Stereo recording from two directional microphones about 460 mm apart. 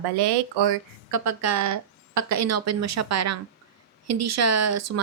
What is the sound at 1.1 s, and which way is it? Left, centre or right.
Speech, right.